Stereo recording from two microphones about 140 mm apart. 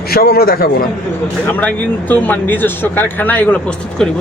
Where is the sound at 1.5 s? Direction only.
10° left (ahead or behind).